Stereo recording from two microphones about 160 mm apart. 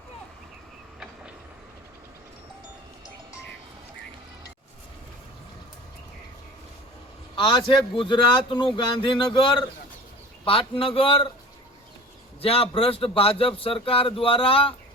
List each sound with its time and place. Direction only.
7.3 s speech: 30° left (ahead or behind)
12.4 s speech: 35° left (ahead or behind)